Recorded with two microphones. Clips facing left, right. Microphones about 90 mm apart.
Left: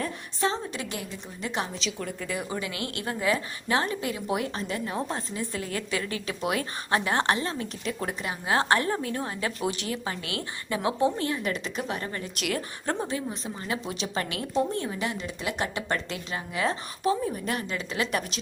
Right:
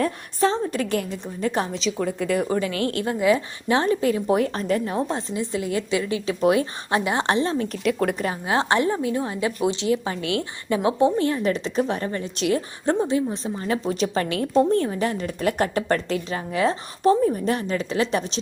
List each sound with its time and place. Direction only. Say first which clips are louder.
0.3 s a woman's voice: right 7 dB; 40° right (ahead or behind)
1.7 s a woman's voice: right 8 dB; 80° right
2.4 s a woman's voice: right 9 dB; 40° right (ahead or behind)
4.9 s speech: right 6 dB; 25° right (ahead or behind)
7.3 s speech: right 5 dB; 30° right (ahead or behind)
7.9 s speech: right 10 dB; 70° right (ahead or behind)
8.4 s speech: right 3 dB; 20° right (ahead or behind)
13.3 s a woman's voice: right 7 dB; 35° right (ahead or behind)
14.5 s a woman's voice: right 8 dB; 50° right (ahead or behind); by 18.3 s 30° right (ahead or behind)